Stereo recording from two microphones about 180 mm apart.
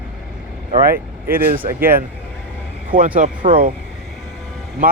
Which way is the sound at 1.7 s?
55° right (ahead or behind).